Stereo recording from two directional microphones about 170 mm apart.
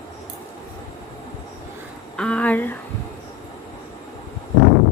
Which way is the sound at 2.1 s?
5° left (ahead or behind).